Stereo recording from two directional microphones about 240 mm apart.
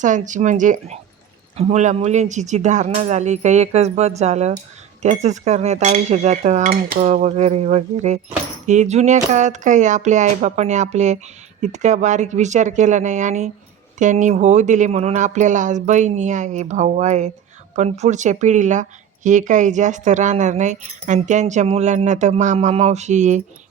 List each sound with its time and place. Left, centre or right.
0.0 s speech: right